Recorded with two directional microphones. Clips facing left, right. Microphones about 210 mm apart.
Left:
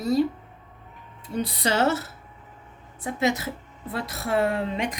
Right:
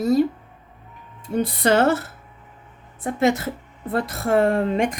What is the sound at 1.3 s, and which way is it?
A woman's voice, 50° right (ahead or behind).